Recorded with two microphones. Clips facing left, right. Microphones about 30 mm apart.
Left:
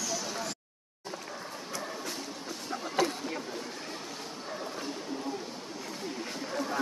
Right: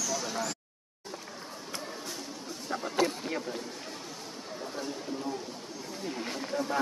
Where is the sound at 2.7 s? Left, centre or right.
Centre.